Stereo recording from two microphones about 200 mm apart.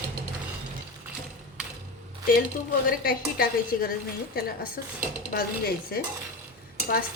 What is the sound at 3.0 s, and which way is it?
Speech, 45° left (ahead or behind).